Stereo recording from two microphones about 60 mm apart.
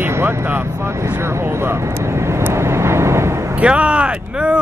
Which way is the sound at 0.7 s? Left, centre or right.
Right.